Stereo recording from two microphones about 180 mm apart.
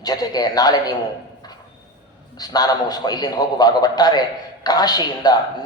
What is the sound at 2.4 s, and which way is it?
A man's voice, 20° left (ahead or behind).